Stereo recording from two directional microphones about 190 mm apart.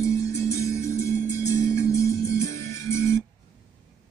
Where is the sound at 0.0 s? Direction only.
15° left (ahead or behind).